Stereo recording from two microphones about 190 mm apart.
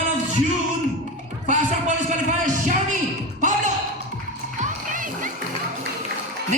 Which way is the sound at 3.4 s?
40° right (ahead or behind).